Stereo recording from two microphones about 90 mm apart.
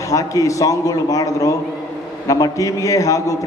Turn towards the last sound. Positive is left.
turn(degrees=40)  # may be behind; listen again after turning